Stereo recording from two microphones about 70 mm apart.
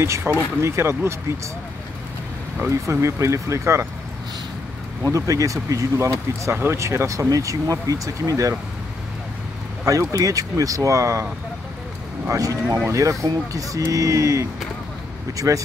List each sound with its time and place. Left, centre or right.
0.0 s speech: right
2.7 s speech: right
5.0 s speech: right
9.8 s speech: right
12.3 s speech: right